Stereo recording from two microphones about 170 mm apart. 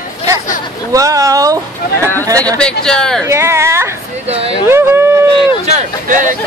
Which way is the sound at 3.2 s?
15° right (ahead or behind).